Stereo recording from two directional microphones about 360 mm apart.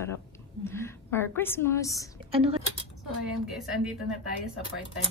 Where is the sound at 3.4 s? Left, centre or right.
Centre.